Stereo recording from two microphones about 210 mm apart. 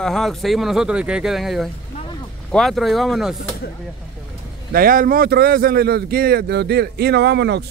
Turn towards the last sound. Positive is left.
turn(degrees=-55)  # may be behind; listen again after turning